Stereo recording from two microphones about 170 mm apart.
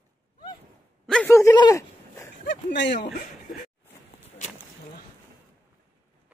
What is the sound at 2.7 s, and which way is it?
Speech, 90° left.